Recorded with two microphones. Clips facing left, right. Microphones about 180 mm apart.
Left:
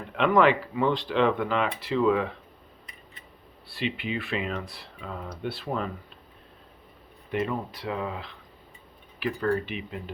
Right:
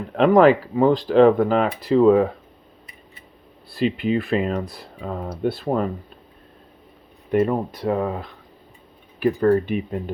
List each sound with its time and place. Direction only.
0.1 s speech: 40° right (ahead or behind)
3.7 s speech: 40° right (ahead or behind)
7.3 s speech: 45° right (ahead or behind)